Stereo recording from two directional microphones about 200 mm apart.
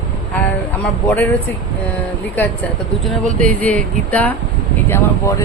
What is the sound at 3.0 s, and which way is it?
Speech, 5° left (ahead or behind).